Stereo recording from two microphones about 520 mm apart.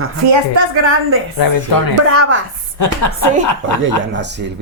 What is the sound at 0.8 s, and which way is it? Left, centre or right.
Speech, right.